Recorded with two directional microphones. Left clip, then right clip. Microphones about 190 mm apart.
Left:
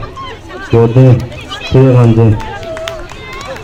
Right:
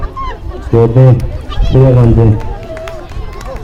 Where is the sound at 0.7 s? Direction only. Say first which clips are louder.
Even; 45° left (ahead or behind).